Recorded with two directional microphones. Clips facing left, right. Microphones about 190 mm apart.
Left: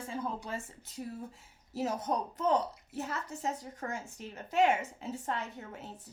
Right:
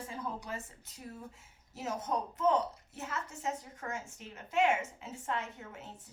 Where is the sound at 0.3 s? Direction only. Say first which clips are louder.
Left 2 dB; 30° left (ahead or behind).